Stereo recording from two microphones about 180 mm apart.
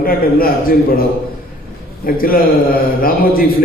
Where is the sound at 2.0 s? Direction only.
55° left (ahead or behind).